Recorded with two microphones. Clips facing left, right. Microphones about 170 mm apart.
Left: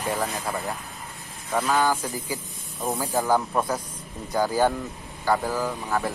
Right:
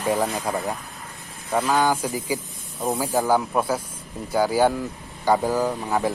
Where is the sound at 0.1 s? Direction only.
20° right (ahead or behind).